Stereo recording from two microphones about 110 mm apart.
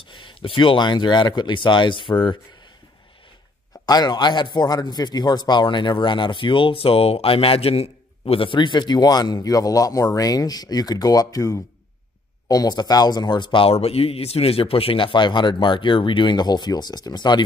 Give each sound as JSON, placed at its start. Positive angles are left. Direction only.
{"t": 0.1, "sound": "speech", "side_deg": 50}
{"t": 3.8, "sound": "a man's voice", "side_deg": 40}